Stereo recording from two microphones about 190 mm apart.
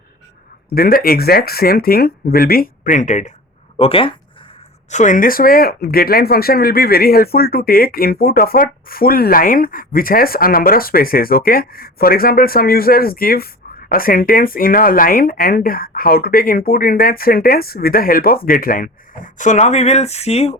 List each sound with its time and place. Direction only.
0.7 s speech: 50° left (ahead or behind); by 4.1 s 30° left (ahead or behind)
4.9 s speech: 40° left (ahead or behind)